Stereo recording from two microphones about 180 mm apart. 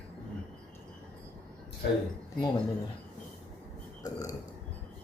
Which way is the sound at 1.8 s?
65° left (ahead or behind).